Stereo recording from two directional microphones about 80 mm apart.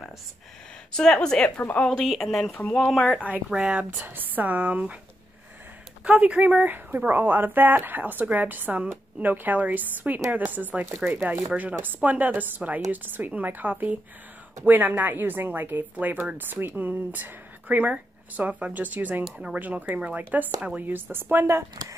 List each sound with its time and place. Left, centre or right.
0.9 s a woman's voice: centre
1.6 s a woman's voice: left
1.9 s speech: centre
4.0 s speech: right
6.0 s speech: centre